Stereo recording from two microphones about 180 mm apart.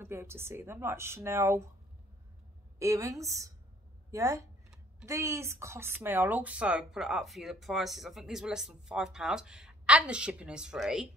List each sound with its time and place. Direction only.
0.0 s speech: 15° right (ahead or behind)
2.8 s speech: 15° right (ahead or behind)